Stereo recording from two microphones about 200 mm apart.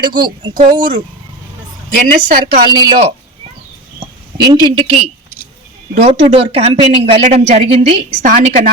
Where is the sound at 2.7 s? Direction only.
20° right (ahead or behind).